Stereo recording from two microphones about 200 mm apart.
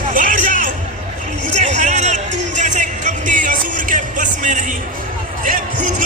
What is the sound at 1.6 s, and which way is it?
Music, 35° right (ahead or behind).